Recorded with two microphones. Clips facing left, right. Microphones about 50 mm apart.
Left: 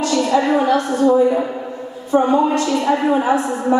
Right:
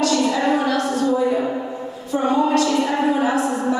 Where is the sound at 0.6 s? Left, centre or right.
Left.